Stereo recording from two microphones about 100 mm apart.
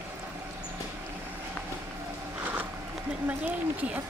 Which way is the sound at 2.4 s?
20° right (ahead or behind).